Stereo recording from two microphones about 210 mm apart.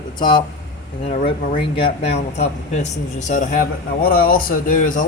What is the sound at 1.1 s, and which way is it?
Speech, 30° left (ahead or behind).